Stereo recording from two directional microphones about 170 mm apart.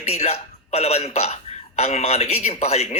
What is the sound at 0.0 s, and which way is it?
A man's voice, 40° left (ahead or behind).